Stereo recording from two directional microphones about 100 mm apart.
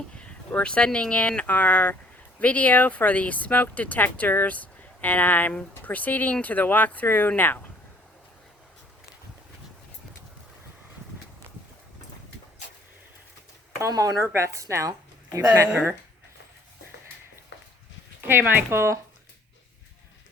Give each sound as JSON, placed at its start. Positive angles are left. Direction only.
{"t": 0.1, "sound": "speech", "side_deg": 10}
{"t": 13.8, "sound": "a woman's voice", "side_deg": -35}
{"t": 15.7, "sound": "speech", "side_deg": -15}
{"t": 18.2, "sound": "speech", "side_deg": -20}